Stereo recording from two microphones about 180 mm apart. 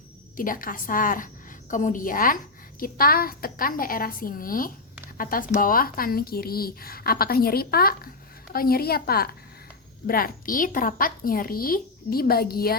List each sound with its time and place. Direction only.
0.3 s a woman's voice: 50° left (ahead or behind)